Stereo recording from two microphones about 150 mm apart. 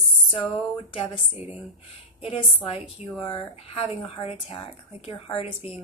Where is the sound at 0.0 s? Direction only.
40° left (ahead or behind).